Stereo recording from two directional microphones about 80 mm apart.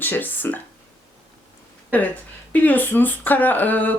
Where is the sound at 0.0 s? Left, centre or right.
Left.